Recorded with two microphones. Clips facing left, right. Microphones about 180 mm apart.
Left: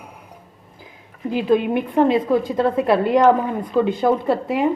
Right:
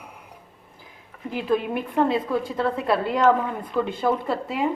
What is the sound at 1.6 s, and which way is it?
A woman's voice, 25° left (ahead or behind).